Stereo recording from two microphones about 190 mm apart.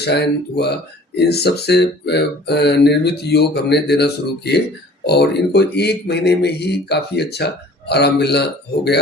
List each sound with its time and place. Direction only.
0.0 s speech: 60° left (ahead or behind)